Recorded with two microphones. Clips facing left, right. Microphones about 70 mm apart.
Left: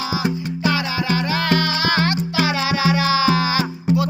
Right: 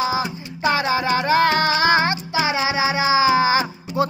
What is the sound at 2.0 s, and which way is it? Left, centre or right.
Music, right.